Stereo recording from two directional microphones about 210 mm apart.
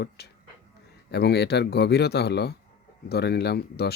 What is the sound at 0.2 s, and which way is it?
Speech, 50° left (ahead or behind).